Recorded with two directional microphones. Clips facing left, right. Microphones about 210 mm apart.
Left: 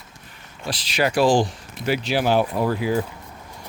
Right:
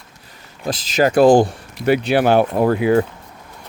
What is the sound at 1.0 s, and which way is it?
Speech, 50° right (ahead or behind).